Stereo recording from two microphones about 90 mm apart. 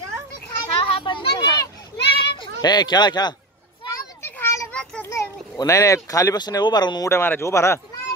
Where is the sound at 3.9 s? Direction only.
30° left (ahead or behind).